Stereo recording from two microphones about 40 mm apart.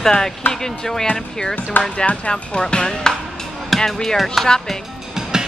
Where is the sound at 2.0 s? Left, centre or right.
Left; by 4.5 s centre.